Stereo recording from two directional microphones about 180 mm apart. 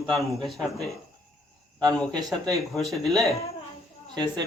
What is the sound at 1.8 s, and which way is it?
Speech, 5° left (ahead or behind).